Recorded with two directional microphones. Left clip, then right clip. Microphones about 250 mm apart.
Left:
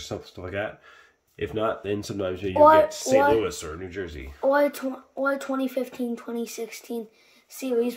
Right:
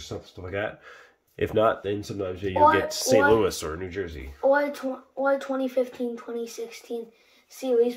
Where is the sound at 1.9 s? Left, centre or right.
Centre.